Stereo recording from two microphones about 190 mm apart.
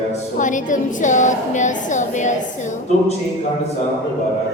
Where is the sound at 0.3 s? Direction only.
40° left (ahead or behind).